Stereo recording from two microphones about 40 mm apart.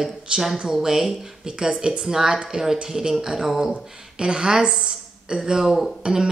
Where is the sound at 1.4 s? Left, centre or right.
Right.